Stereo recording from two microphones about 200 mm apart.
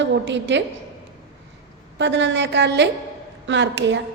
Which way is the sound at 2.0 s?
65° right (ahead or behind).